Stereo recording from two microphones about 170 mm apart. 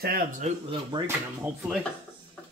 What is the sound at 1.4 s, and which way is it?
Speech, 5° right (ahead or behind).